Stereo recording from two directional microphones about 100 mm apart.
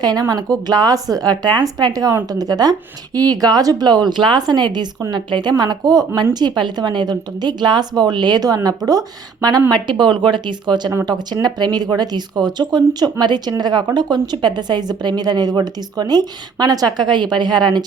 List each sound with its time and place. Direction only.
0.0 s speech: 45° right (ahead or behind)